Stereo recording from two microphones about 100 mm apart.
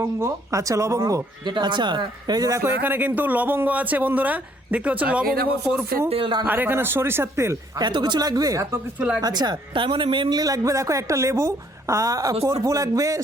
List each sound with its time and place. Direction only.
0.0 s speech: 30° right (ahead or behind)
1.5 s speech: 50° right (ahead or behind); by 2.7 s 30° right (ahead or behind)
2.8 s speech: 20° right (ahead or behind)
6.1 s speech: 65° right (ahead or behind)
6.4 s speech: 20° right (ahead or behind)
7.8 s speech: 50° right (ahead or behind)
9.0 s speech: 10° right (ahead or behind)
9.2 s speech: 45° right (ahead or behind)